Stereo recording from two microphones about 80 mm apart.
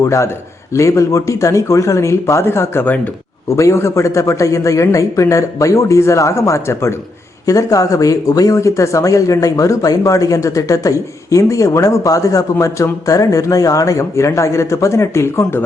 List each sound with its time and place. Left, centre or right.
0.0 s speech: left
3.5 s speech: left